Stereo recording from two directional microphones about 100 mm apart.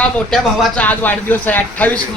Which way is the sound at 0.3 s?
5° left (ahead or behind).